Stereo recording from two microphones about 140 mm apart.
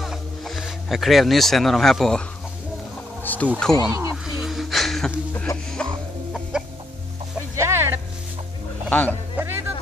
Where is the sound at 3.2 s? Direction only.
10° left (ahead or behind).